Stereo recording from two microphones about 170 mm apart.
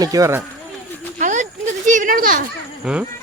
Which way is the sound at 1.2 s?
45° right (ahead or behind).